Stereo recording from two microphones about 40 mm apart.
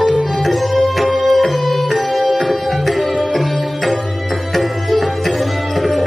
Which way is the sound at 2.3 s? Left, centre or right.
Centre.